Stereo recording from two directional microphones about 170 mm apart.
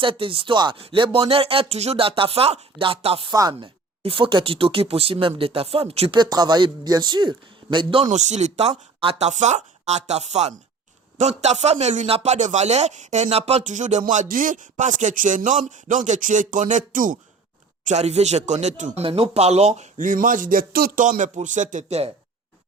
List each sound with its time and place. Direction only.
0.0 s speech: 30° right (ahead or behind)
8.0 s a man's voice: 45° right (ahead or behind)
17.8 s a man's voice: 40° right (ahead or behind)